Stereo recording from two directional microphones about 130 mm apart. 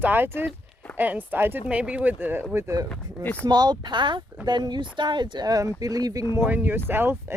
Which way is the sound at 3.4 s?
30° right (ahead or behind).